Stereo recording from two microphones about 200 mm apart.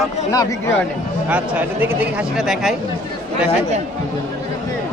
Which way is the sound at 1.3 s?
10° right (ahead or behind).